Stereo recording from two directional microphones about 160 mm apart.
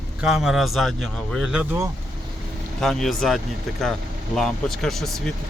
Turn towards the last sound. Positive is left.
turn(degrees=0)  # may be behind; listen again after turning